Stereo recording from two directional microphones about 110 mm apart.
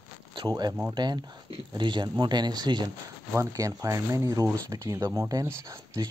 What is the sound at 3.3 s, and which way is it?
Speech, 30° right (ahead or behind).